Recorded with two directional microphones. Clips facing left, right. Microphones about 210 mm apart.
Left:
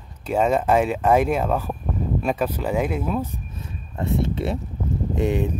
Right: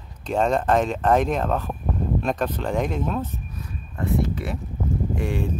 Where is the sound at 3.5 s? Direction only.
25° left (ahead or behind).